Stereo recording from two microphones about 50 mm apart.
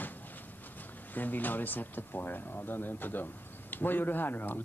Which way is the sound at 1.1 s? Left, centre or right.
Left.